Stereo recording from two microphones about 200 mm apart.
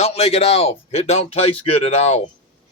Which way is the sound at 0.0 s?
30° left (ahead or behind).